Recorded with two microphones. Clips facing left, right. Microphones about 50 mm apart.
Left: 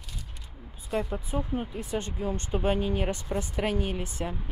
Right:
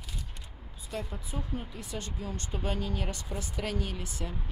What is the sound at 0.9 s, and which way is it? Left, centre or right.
Speech, centre.